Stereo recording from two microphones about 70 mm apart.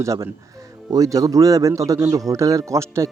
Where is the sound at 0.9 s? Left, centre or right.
Right.